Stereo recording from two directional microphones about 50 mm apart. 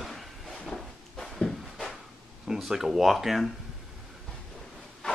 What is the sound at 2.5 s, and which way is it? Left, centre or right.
Speech, centre.